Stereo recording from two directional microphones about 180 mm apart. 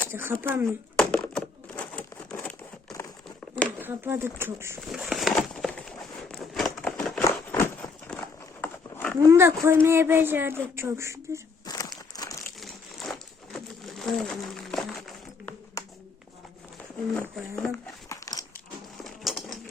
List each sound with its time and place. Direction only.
0.1 s speech: 10° right (ahead or behind)
0.9 s crumpling: 5° left (ahead or behind)
3.8 s speech: 10° right (ahead or behind)
4.9 s a sound: centre (ahead or behind)
8.6 s livestock: 10° left (ahead or behind)
9.2 s speech: 15° right (ahead or behind)
11.6 s a sound: 20° left (ahead or behind)
12.5 s pigeon: centre (ahead or behind)
15.8 s a sound: 15° left (ahead or behind)
17.2 s speech: 10° left (ahead or behind)
18.1 s crunch: 20° left (ahead or behind)
19.0 s a sound: centre (ahead or behind)